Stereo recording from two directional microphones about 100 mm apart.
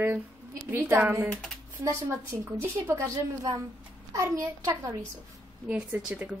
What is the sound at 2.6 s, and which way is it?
A woman's voice, 30° right (ahead or behind).